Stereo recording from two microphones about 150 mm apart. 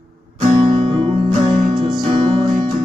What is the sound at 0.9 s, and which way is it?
Music, 40° right (ahead or behind).